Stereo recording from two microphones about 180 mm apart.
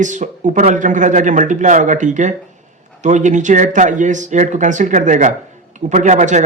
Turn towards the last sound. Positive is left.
turn(degrees=-40)  # may be behind; listen again after turning